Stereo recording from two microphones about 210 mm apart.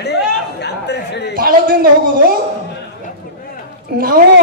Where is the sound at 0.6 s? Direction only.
55° left (ahead or behind).